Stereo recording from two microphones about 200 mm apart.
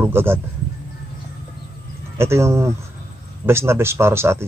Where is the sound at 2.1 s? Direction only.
15° right (ahead or behind).